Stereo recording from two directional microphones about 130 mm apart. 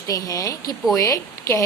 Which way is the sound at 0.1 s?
25° left (ahead or behind).